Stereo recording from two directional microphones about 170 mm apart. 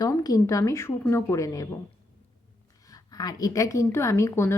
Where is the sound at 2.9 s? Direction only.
20° left (ahead or behind).